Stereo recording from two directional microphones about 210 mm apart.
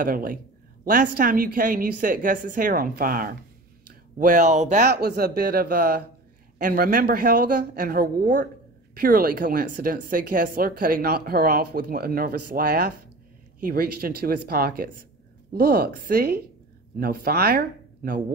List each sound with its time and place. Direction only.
0.0 s speech: 40° right (ahead or behind)
4.9 s speech: 50° right (ahead or behind)